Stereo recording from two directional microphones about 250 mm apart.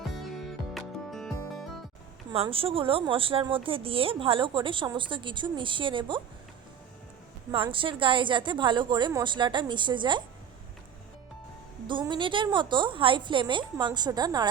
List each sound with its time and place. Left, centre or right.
0.4 s music: centre
2.3 s speech: right
7.5 s speech: right
11.9 s speech: centre